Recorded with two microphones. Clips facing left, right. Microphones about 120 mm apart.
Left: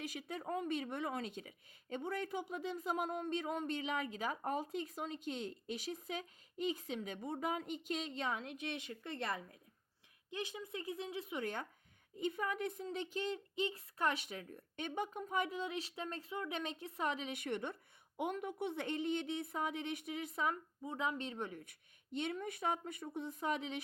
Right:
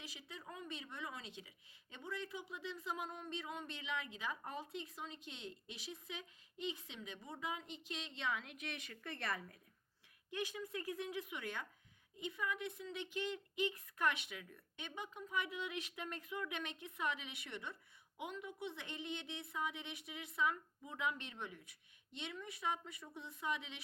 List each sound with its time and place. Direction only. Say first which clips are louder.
0.0 s speech: left 10 dB; 50° left (ahead or behind)